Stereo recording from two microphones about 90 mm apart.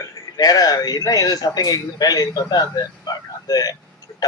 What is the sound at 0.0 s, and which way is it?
A man's voice, 45° left (ahead or behind).